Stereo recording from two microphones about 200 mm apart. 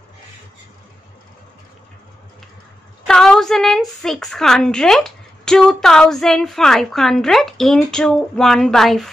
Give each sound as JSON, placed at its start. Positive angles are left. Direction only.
{"t": 3.1, "sound": "a woman's voice", "side_deg": 5}